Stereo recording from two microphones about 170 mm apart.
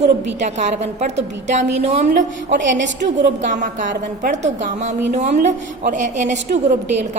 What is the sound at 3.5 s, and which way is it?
A woman's voice, 50° right (ahead or behind).